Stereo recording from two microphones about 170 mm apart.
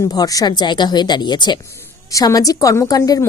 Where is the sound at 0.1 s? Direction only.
20° left (ahead or behind).